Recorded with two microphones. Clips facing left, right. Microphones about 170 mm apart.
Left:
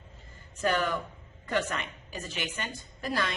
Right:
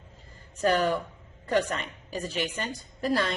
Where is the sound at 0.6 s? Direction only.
35° right (ahead or behind).